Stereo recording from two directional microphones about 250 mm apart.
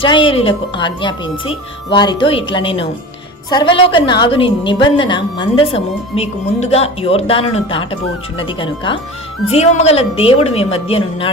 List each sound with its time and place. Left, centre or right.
0.0 s a woman's voice: left